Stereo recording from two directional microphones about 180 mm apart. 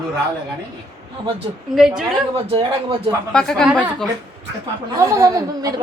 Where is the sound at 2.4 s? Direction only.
30° right (ahead or behind).